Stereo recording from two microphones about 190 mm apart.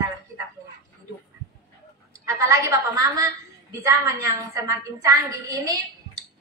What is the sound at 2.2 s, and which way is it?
A woman's voice, 15° right (ahead or behind).